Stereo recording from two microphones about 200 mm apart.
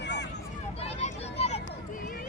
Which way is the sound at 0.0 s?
60° left (ahead or behind).